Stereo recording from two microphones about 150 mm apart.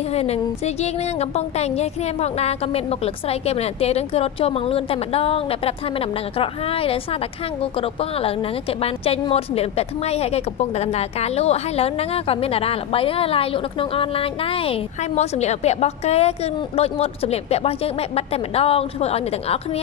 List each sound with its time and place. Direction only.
0.1 s a woman's voice: 45° left (ahead or behind)